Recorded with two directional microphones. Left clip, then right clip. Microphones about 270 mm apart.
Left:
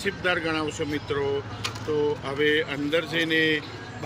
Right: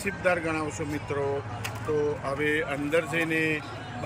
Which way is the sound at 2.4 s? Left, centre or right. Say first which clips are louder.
Left 6 dB; centre.